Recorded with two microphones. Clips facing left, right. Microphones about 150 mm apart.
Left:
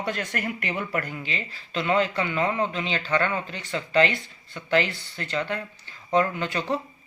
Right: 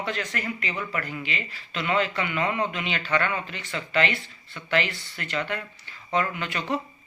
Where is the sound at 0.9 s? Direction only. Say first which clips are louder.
Left 2 dB; 40° left (ahead or behind).